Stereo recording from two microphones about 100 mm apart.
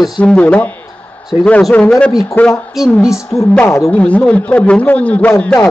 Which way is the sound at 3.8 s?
15° left (ahead or behind).